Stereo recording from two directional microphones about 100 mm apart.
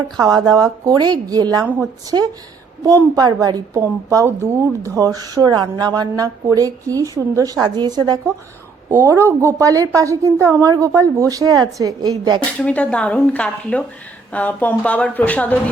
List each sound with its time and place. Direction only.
0.2 s a woman's voice: 40° right (ahead or behind)
2.8 s a woman's voice: 35° right (ahead or behind)
8.9 s a woman's voice: 30° right (ahead or behind); by 12.4 s 45° right (ahead or behind)
12.5 s a woman's voice: 15° left (ahead or behind)